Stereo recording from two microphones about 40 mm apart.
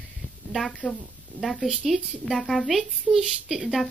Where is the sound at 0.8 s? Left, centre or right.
Left.